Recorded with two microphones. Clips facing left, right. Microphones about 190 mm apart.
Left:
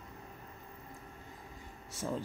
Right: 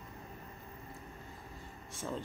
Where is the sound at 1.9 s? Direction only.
10° left (ahead or behind).